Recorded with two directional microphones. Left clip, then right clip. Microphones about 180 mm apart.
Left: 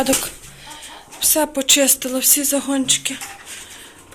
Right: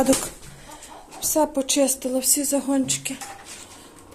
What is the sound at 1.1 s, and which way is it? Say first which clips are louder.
Speech: left 2 dB; 5° right (ahead or behind).